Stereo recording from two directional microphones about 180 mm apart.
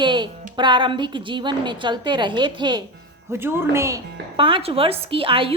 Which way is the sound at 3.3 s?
15° right (ahead or behind).